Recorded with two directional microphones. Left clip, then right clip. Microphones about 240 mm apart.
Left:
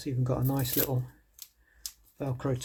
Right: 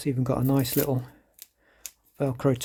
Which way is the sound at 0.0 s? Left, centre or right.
Right.